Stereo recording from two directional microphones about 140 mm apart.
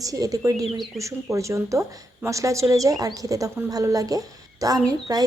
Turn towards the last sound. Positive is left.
turn(degrees=-25)  # may be behind; listen again after turning